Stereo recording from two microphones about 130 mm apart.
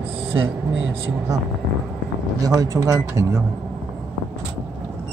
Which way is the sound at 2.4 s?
25° right (ahead or behind).